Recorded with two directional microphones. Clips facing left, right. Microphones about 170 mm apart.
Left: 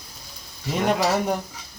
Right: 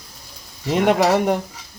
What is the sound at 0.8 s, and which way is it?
Speech, 75° right (ahead or behind).